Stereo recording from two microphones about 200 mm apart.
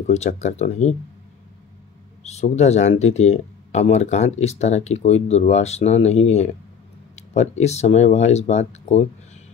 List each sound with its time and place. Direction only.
0.0 s speech: 35° left (ahead or behind)
2.2 s speech: 35° left (ahead or behind)